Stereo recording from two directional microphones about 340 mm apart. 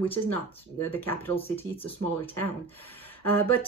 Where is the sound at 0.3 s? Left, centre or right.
Centre.